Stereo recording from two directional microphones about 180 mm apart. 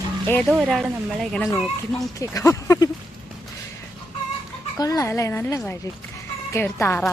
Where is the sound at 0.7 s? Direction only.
Centre (ahead or behind).